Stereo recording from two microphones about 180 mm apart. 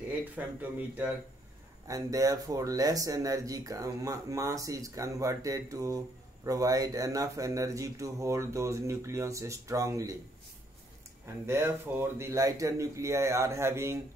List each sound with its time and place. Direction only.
0.6 s speech: 10° right (ahead or behind)
11.4 s speech: 15° right (ahead or behind)